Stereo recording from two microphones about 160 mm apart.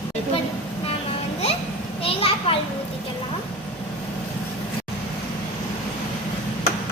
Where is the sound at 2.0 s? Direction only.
35° left (ahead or behind).